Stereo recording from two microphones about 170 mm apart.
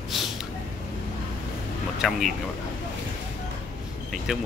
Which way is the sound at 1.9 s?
Centre (ahead or behind).